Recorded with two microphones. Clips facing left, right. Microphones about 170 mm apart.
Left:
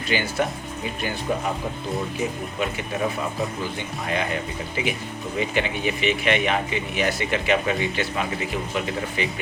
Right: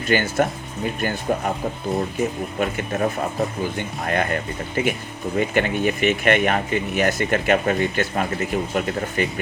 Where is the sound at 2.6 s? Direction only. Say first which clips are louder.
Right 3 dB; 50° right (ahead or behind).